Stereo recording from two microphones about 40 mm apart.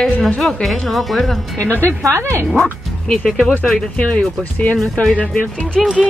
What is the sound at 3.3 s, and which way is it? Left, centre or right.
Speech, centre.